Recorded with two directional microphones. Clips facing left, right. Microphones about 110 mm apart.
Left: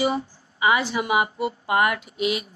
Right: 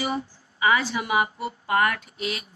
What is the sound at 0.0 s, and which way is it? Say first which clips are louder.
Speech: left 5 dB; 20° left (ahead or behind).